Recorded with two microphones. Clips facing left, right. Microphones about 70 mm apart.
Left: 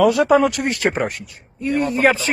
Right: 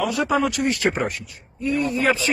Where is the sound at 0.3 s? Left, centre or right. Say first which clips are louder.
Left 5 dB; left.